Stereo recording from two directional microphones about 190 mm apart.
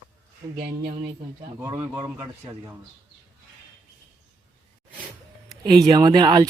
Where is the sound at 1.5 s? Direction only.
10° right (ahead or behind).